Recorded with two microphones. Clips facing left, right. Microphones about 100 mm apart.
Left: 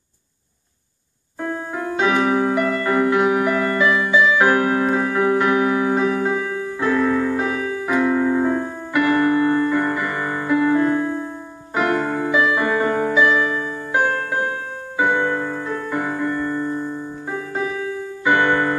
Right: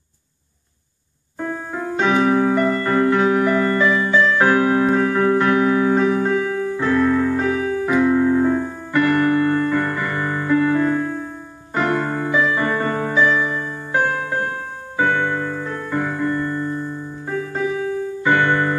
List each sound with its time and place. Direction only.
1.4 s music: 5° left (ahead or behind)
7.5 s music: 30° right (ahead or behind)
7.8 s music: centre (ahead or behind)